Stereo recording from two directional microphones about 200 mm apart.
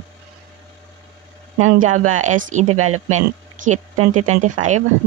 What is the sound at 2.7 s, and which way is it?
Speech, 90° right.